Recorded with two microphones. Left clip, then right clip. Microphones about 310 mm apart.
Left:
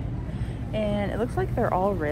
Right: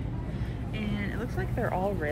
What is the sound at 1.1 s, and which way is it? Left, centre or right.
Speech, left.